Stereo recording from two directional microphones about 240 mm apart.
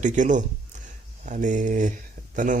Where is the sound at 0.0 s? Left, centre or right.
Right.